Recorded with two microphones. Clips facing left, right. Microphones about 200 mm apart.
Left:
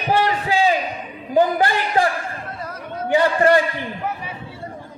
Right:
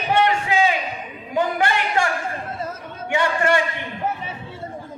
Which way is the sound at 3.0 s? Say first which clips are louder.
Left 5 dB; 35° left (ahead or behind).